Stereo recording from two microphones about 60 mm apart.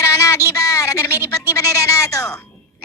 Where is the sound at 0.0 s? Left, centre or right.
Left.